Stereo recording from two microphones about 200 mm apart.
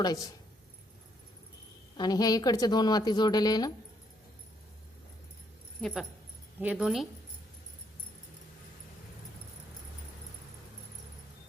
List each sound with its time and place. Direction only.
2.0 s a woman's voice: 20° left (ahead or behind)
5.8 s speech: centre (ahead or behind)